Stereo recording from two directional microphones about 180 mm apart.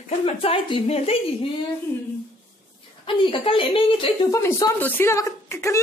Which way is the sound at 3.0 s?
30° left (ahead or behind).